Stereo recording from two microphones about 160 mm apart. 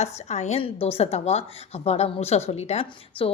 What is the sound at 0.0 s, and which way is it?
A woman's voice, 45° left (ahead or behind).